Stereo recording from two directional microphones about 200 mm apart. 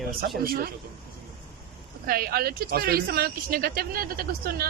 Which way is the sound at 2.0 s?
50° right (ahead or behind).